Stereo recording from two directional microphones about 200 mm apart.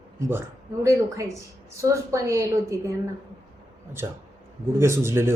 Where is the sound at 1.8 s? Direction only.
15° right (ahead or behind).